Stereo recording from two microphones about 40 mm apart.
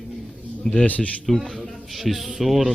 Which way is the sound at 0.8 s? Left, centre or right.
Left.